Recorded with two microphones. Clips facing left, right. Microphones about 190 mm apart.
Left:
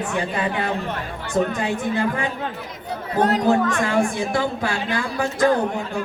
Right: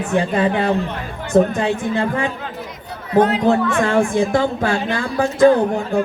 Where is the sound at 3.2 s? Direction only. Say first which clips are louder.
Right 3 dB; 40° left (ahead or behind).